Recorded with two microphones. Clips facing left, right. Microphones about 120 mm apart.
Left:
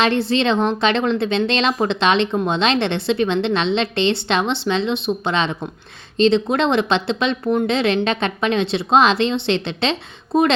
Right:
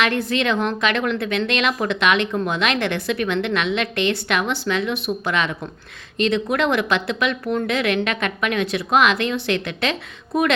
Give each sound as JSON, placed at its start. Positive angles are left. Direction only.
{"t": 0.0, "sound": "a woman's voice", "side_deg": 30}